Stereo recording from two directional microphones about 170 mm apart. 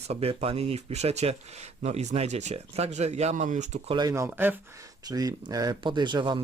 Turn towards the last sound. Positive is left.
turn(degrees=-25)  # may be behind; listen again after turning